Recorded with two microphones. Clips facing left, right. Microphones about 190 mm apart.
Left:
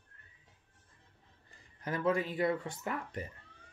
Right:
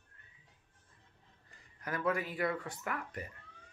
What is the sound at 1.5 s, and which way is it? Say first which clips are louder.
Speech: left 2 dB; 25° left (ahead or behind).